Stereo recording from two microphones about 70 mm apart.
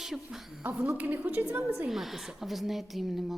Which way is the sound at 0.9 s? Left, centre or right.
Right.